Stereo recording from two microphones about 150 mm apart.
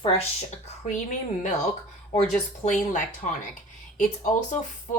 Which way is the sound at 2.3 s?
55° left (ahead or behind).